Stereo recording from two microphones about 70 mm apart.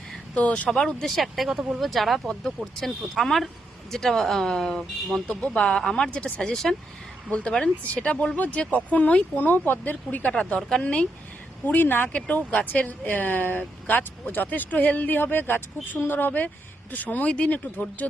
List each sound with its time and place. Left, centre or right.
0.3 s speech: centre
1.5 s speech: centre
1.8 s speech: centre
5.3 s speech: centre
10.3 s speech: centre
11.6 s speech: left